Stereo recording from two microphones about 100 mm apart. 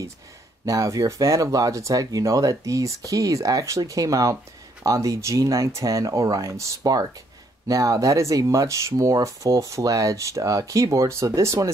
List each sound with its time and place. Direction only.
0.7 s speech: 35° right (ahead or behind)